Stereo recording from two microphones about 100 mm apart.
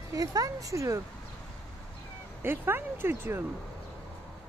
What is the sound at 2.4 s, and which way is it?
Speech, 20° right (ahead or behind).